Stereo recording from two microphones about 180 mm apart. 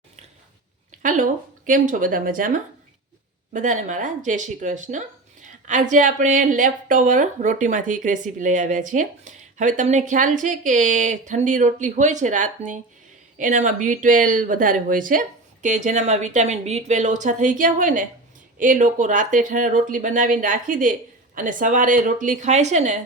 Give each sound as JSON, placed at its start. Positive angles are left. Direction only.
{"t": 0.9, "sound": "speech", "side_deg": -45}